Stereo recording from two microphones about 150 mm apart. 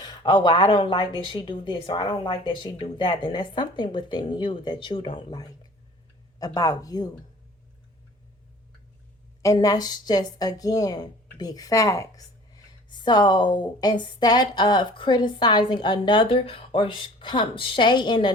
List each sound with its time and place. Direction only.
0.0 s a woman's voice: 30° left (ahead or behind)
9.4 s a woman's voice: 25° left (ahead or behind)